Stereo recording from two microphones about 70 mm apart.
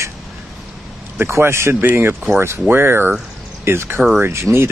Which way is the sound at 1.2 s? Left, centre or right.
Right.